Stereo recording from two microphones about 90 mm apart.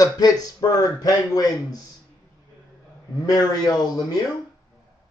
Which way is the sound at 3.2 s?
45° left (ahead or behind).